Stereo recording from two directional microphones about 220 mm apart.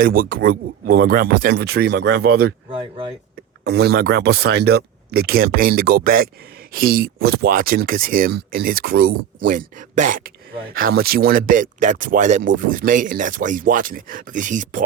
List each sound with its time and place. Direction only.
0.0 s speech: 40° right (ahead or behind)
2.6 s speech: 25° right (ahead or behind)
3.6 s speech: 50° right (ahead or behind)